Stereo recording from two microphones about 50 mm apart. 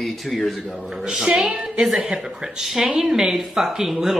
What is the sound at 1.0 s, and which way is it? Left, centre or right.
A woman's voice, centre.